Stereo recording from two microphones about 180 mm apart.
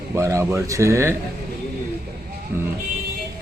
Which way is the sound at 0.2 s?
15° right (ahead or behind).